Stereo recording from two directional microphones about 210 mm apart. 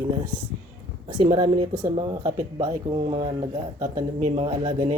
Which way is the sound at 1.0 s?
25° right (ahead or behind).